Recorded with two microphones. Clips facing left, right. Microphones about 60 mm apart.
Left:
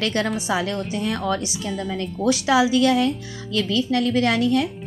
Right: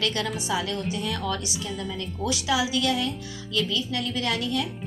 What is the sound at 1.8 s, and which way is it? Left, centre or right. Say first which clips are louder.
A woman's voice: left 8 dB; left.